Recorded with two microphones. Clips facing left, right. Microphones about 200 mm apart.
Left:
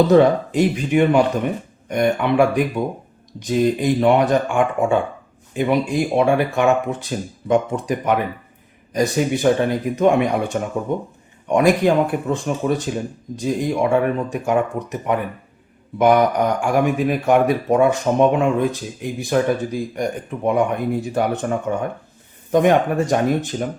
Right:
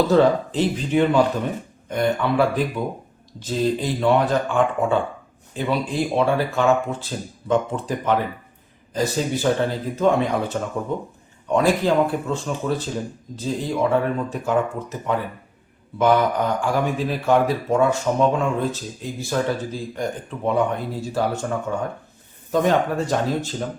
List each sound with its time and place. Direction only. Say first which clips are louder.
0.1 s speech: left 3 dB; 15° left (ahead or behind)